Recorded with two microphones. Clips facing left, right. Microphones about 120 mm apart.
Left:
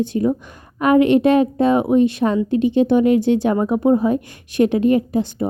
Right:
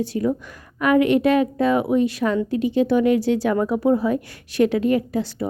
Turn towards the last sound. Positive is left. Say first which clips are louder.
# left 4 dB
turn(degrees=25)  # may be behind; listen again after turning